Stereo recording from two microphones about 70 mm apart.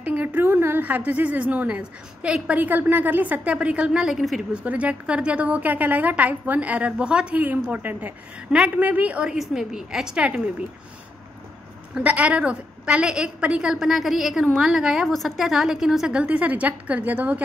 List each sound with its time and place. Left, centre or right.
0.0 s a woman's voice: right; by 4.4 s centre
4.6 s a woman's voice: centre
11.9 s a woman's voice: centre
16.3 s a woman's voice: right